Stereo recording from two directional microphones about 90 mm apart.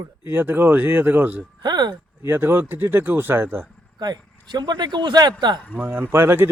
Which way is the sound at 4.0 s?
50° right (ahead or behind).